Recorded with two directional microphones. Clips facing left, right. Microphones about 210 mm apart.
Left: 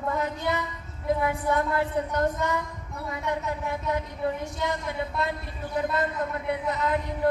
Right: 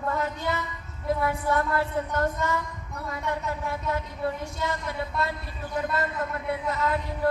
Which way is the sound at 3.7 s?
15° left (ahead or behind).